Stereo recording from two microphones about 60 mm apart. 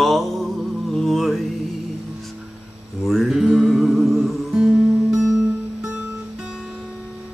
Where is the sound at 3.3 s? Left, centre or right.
Centre.